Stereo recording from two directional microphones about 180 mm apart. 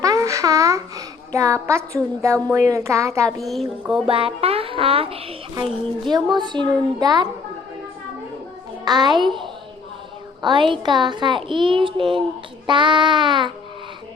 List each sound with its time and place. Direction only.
0.0 s a child's voice: 20° right (ahead or behind)
3.4 s speech: centre (ahead or behind)
4.0 s music: 30° right (ahead or behind)
6.1 s speech: 25° right (ahead or behind)
8.8 s a child's voice: 25° right (ahead or behind)
10.4 s speech: 25° right (ahead or behind)